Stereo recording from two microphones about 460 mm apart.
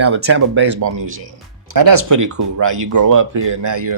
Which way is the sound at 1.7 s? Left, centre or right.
Right.